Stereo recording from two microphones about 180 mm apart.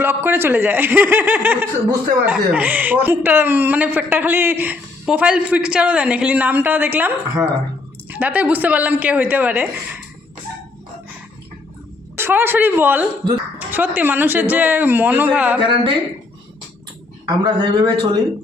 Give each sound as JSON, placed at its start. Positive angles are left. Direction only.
{"t": 0.0, "sound": "speech", "side_deg": -10}
{"t": 12.1, "sound": "speech", "side_deg": -10}
{"t": 15.6, "sound": "speech", "side_deg": -30}
{"t": 17.2, "sound": "speech", "side_deg": -25}